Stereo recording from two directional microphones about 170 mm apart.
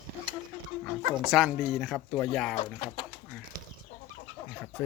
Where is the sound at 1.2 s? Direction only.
Centre (ahead or behind).